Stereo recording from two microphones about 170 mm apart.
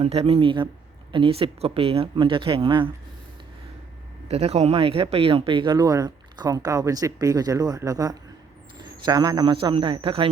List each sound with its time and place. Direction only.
0.0 s speech: 35° right (ahead or behind)
4.3 s speech: 35° right (ahead or behind)